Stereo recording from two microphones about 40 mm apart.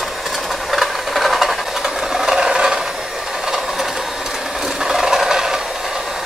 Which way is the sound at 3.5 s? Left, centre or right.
Centre.